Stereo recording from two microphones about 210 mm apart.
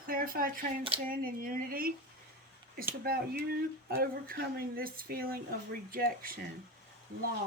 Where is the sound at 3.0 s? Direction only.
45° right (ahead or behind).